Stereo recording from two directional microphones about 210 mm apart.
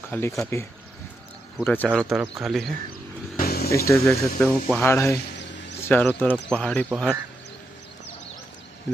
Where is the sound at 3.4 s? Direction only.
50° left (ahead or behind).